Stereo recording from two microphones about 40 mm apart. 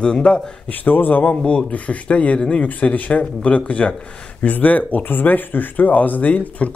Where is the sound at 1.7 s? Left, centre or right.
Left.